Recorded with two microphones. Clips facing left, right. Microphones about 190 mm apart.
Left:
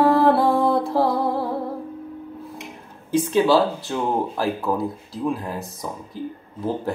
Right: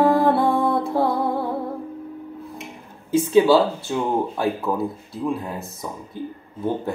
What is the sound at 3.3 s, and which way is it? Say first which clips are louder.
Music: right 3 dB; centre (ahead or behind).